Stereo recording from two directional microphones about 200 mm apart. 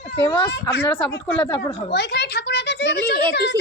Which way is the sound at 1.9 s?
60° left (ahead or behind).